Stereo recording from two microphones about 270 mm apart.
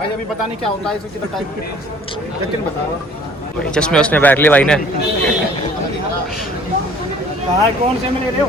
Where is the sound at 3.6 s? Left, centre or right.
Centre.